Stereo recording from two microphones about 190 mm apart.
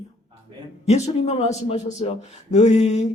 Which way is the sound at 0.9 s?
35° left (ahead or behind).